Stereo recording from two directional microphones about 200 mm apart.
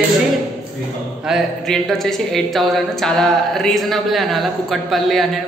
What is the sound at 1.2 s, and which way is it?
Speech, centre (ahead or behind).